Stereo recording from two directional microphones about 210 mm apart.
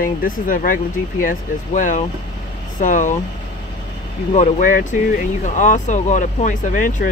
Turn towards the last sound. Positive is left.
turn(degrees=40)  # may be behind; listen again after turning